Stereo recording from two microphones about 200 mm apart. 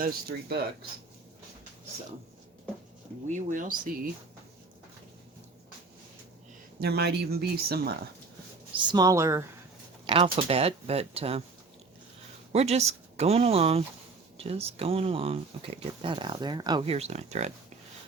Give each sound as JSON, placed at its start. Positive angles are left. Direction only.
{"t": 0.0, "sound": "speech", "side_deg": -50}
{"t": 3.2, "sound": "speech", "side_deg": -40}
{"t": 6.7, "sound": "speech", "side_deg": -55}
{"t": 8.9, "sound": "speech", "side_deg": -20}
{"t": 10.3, "sound": "speech", "side_deg": -30}
{"t": 12.5, "sound": "speech", "side_deg": -30}